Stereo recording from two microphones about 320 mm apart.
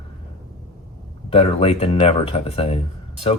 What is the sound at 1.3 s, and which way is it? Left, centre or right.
Speech, centre.